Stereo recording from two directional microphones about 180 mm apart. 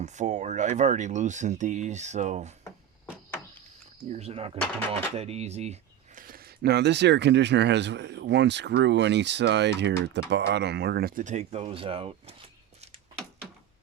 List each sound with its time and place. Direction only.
0.0 s speech: 40° right (ahead or behind)
4.1 s speech: 35° right (ahead or behind)
6.2 s speech: 55° right (ahead or behind); by 12.9 s 35° right (ahead or behind)